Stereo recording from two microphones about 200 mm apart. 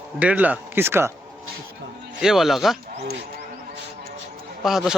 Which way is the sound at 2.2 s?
Centre (ahead or behind).